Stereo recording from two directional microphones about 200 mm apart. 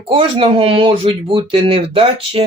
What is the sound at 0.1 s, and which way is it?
Speech, 25° right (ahead or behind).